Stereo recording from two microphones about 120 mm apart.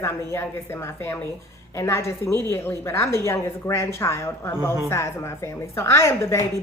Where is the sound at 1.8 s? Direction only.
25° left (ahead or behind).